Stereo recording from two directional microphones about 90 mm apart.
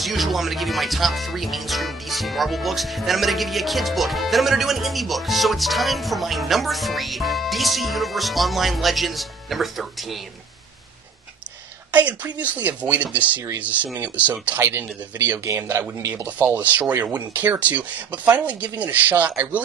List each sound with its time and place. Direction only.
0.0 s music: centre (ahead or behind)
11.9 s speech: 15° right (ahead or behind)
15.4 s a man's voice: 30° right (ahead or behind)
16.3 s speech: 20° right (ahead or behind)